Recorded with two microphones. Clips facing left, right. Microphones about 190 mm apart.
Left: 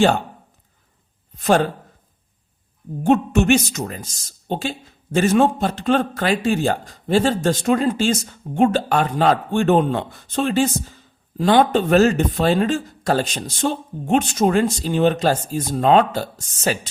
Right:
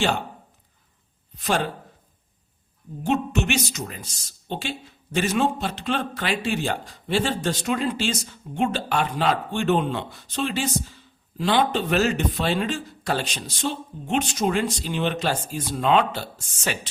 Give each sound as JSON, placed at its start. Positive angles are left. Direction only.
{"t": 1.4, "sound": "speech", "side_deg": 45}
{"t": 3.0, "sound": "speech", "side_deg": 50}